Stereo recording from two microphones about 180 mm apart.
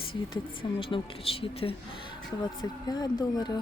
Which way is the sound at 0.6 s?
25° left (ahead or behind).